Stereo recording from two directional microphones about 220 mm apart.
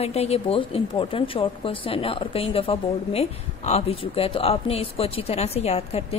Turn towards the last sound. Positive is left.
turn(degrees=30)  # may be behind; listen again after turning